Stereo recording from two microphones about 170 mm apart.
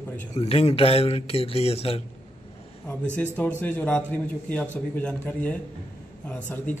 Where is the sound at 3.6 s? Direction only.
10° left (ahead or behind).